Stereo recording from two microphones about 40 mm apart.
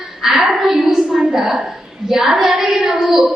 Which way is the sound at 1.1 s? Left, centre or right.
Right.